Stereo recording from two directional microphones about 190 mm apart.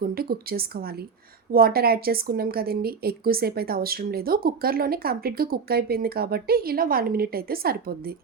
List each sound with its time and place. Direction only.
0.0 s a woman's voice: 55° right (ahead or behind)